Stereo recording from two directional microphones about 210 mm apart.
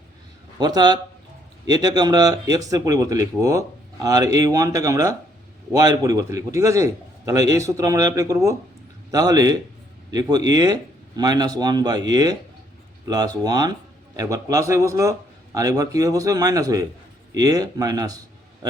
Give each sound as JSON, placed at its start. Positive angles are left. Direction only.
{"t": 0.6, "sound": "speech", "side_deg": -20}